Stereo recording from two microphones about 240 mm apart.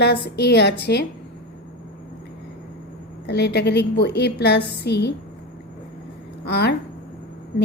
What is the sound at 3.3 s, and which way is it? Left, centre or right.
A woman's voice, left.